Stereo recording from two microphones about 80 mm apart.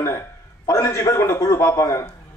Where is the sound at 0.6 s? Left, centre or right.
Left.